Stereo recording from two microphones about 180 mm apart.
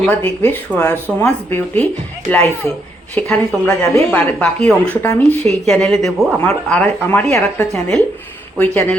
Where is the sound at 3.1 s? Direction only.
10° left (ahead or behind).